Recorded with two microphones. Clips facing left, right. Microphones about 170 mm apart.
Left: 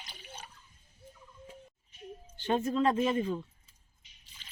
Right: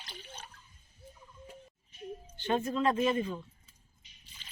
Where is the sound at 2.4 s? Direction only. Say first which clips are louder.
Left 1 dB; 30° left (ahead or behind).